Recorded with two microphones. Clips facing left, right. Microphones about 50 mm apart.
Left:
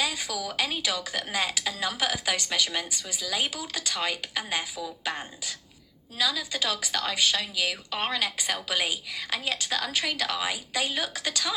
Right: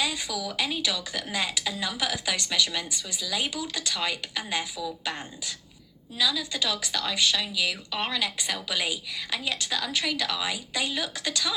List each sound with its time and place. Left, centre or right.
0.0 s a woman's voice: left